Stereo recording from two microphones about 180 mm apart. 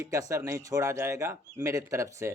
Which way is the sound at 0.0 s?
20° right (ahead or behind).